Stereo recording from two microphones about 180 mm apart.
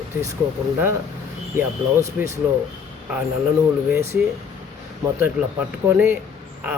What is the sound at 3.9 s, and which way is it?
Speech, 15° right (ahead or behind).